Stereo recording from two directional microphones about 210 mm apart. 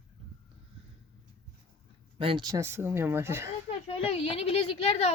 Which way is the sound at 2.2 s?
25° right (ahead or behind).